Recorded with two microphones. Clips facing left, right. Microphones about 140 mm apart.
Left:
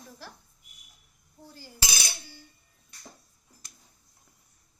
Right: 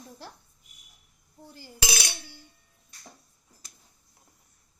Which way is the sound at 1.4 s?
20° right (ahead or behind).